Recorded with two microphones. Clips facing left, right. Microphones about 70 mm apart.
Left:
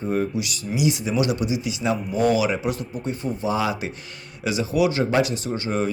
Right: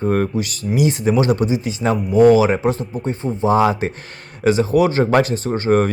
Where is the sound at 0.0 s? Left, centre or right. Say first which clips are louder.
Right 5 dB; right.